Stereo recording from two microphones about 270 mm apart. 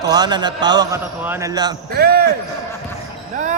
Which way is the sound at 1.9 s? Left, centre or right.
Right.